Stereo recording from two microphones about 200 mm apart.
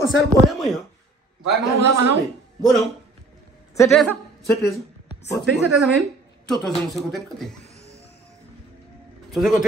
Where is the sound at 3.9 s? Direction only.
Centre (ahead or behind).